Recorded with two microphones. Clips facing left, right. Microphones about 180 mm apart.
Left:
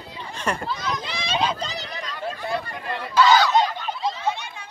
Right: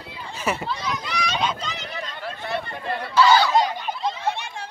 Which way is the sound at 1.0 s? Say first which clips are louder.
Left 1 dB; 30° left (ahead or behind).